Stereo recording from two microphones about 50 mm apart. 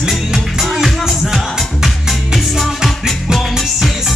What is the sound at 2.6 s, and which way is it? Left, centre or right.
Music, centre.